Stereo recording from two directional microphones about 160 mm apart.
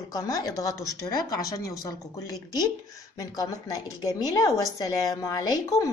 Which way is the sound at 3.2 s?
25° left (ahead or behind).